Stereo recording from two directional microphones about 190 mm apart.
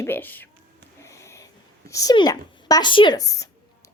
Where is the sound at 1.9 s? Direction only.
20° left (ahead or behind).